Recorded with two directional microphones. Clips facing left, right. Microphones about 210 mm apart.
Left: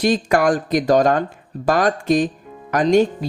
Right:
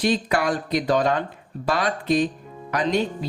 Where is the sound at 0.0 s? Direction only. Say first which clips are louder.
Left 5 dB; 45° left (ahead or behind).